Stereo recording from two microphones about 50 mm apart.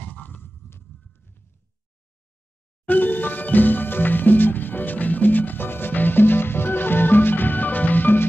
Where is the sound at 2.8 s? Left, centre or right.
Left.